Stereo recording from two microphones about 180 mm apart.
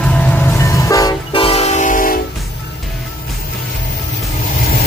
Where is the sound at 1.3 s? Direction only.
35° left (ahead or behind).